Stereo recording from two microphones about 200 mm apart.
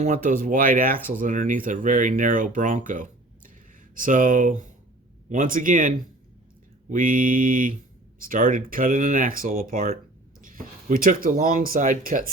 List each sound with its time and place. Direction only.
0.0 s speech: 40° right (ahead or behind)
6.9 s speech: 40° right (ahead or behind)